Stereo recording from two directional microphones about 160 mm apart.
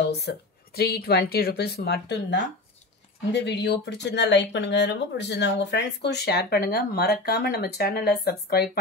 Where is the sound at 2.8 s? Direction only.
45° left (ahead or behind).